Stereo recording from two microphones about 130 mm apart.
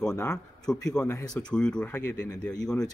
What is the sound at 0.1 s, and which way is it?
Speech, 25° left (ahead or behind).